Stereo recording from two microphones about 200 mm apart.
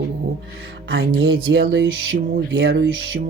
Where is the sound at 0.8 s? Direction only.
75° right (ahead or behind).